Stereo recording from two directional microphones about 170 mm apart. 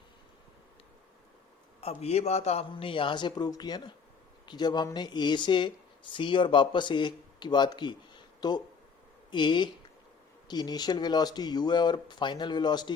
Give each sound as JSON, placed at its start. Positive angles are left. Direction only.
{"t": 1.8, "sound": "speech", "side_deg": 35}